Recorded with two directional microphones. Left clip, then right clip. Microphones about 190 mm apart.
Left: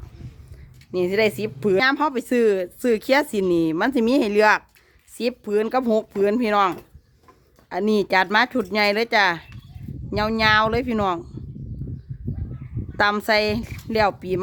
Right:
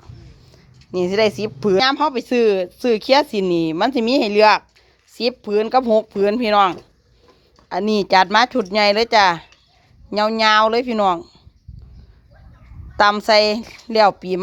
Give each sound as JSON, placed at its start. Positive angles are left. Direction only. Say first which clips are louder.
{"t": 0.9, "sound": "speech", "louder": "right 3 dB", "side_deg": 15}
{"t": 11.8, "sound": "a sound", "louder": "left 17 dB", "side_deg": 10}
{"t": 13.0, "sound": "speech", "louder": "right 6 dB", "side_deg": 15}